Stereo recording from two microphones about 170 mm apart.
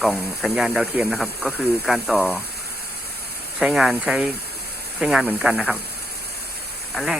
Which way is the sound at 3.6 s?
5° right (ahead or behind).